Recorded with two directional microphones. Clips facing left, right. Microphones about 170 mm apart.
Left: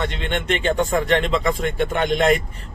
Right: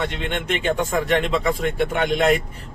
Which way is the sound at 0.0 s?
5° right (ahead or behind).